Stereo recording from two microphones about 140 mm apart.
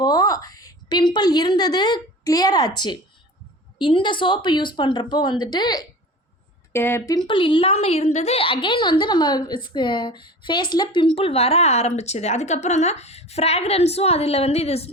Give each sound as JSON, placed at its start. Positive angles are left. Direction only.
{"t": 0.0, "sound": "a woman's voice", "side_deg": 30}
{"t": 6.7, "sound": "speech", "side_deg": 15}
{"t": 7.3, "sound": "a woman's voice", "side_deg": 35}